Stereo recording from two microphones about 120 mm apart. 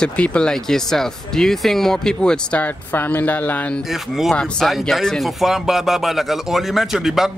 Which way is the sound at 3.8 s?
Centre (ahead or behind).